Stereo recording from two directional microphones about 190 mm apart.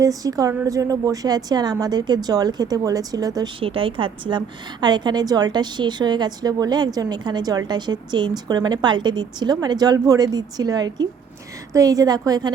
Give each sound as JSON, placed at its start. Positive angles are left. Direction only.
{"t": 0.0, "sound": "a woman's voice", "side_deg": -20}